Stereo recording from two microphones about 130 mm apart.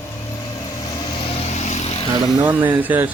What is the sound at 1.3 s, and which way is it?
Vehicle, 60° left (ahead or behind).